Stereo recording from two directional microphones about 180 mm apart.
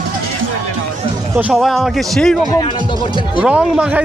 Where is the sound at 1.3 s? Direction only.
Centre (ahead or behind).